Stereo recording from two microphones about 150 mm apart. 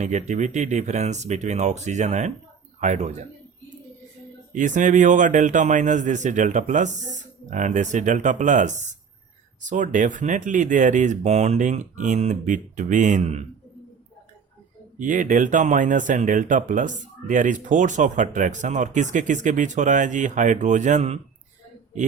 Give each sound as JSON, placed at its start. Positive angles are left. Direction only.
{"t": 0.0, "sound": "speech", "side_deg": -50}
{"t": 4.5, "sound": "speech", "side_deg": -55}
{"t": 14.9, "sound": "speech", "side_deg": -60}